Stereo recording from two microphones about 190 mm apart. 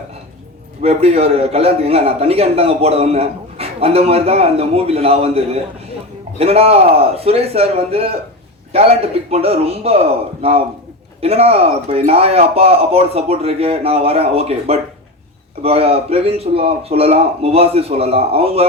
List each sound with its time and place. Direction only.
0.8 s a man's voice: 30° right (ahead or behind)